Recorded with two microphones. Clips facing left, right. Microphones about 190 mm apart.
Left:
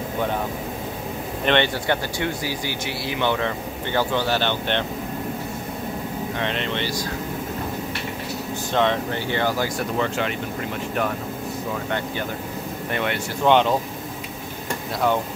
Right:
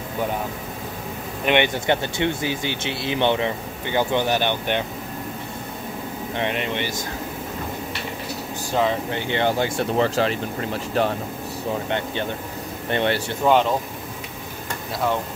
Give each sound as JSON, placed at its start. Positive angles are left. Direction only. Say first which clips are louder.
{"t": 1.4, "sound": "speech", "louder": "right 1 dB", "side_deg": -15}
{"t": 6.3, "sound": "speech", "louder": "right 3 dB", "side_deg": -15}
{"t": 8.7, "sound": "speech", "louder": "even", "side_deg": -5}
{"t": 9.1, "sound": "speech", "louder": "right 1 dB", "side_deg": -20}
{"t": 13.5, "sound": "speech", "louder": "left 1 dB", "side_deg": 0}